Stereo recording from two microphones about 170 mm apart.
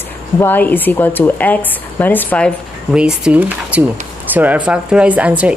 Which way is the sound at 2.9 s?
5° right (ahead or behind).